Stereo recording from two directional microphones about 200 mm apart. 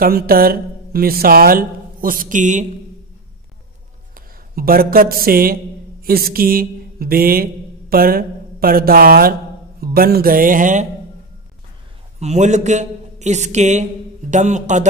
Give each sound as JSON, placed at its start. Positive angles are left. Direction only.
{"t": 0.0, "sound": "speech", "side_deg": -50}
{"t": 4.1, "sound": "a man's voice", "side_deg": -45}
{"t": 12.2, "sound": "a man's voice", "side_deg": -35}